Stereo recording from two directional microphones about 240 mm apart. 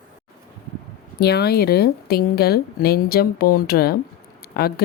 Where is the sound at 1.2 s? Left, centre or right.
Left.